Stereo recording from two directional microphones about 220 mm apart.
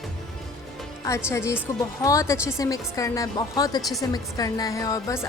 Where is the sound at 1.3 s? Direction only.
10° left (ahead or behind).